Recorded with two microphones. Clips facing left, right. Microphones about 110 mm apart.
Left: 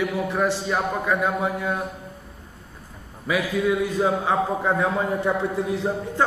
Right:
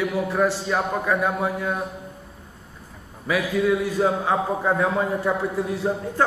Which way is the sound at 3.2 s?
10° left (ahead or behind).